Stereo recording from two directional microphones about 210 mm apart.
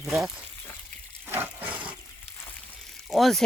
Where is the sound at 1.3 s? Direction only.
10° right (ahead or behind).